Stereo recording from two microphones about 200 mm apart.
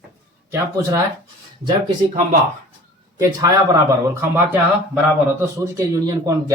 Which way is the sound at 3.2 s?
15° right (ahead or behind).